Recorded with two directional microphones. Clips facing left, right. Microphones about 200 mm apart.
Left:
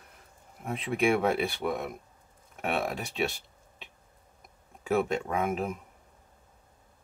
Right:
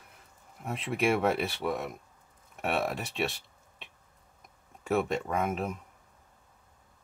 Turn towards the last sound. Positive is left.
turn(degrees=0)  # may be behind; listen again after turning